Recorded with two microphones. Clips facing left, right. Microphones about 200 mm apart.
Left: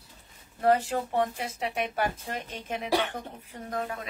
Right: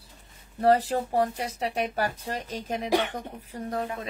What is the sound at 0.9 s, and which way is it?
Speech, 35° right (ahead or behind).